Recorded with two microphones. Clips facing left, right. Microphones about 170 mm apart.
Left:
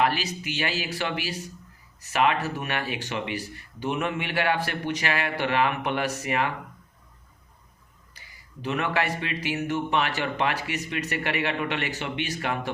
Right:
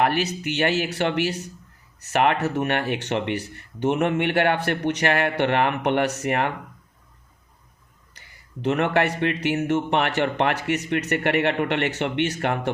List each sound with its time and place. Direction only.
0.0 s speech: 60° right (ahead or behind)
2.1 s speech: 55° right (ahead or behind)
8.6 s speech: 60° right (ahead or behind)